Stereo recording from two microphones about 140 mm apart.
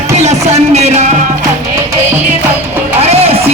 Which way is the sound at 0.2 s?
55° right (ahead or behind).